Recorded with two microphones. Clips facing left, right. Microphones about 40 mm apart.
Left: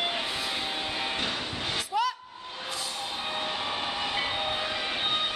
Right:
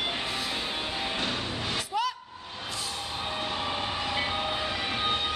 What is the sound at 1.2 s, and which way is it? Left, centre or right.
Music, centre.